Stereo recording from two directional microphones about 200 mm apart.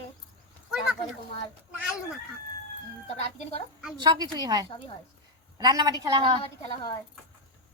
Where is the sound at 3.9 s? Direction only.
20° right (ahead or behind).